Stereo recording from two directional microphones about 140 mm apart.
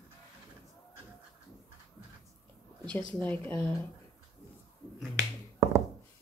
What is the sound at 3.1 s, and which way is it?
Speech, 10° left (ahead or behind).